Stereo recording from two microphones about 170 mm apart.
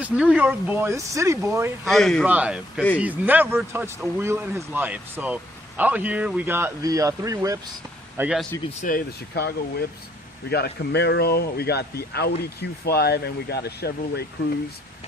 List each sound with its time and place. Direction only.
0.0 s speech: 5° right (ahead or behind)
1.9 s speech: centre (ahead or behind); by 7.6 s 20° right (ahead or behind)
8.2 s speech: 5° right (ahead or behind)
8.8 s speech: 60° left (ahead or behind)